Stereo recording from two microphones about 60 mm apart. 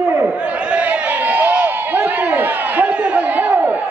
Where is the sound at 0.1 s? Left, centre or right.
Right.